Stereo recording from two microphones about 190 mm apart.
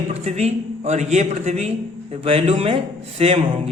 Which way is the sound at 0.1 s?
35° right (ahead or behind).